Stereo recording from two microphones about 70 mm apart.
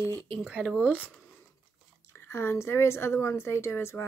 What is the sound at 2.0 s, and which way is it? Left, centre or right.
Speech, left.